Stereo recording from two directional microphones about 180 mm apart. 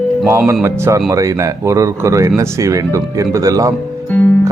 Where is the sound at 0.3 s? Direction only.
15° right (ahead or behind).